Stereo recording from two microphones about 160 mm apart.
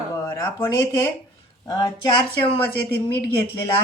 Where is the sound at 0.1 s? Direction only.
20° left (ahead or behind).